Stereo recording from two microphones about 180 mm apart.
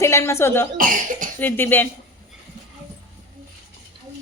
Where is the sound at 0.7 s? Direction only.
50° right (ahead or behind).